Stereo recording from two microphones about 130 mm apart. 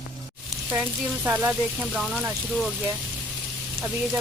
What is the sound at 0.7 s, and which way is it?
Speech, 10° right (ahead or behind).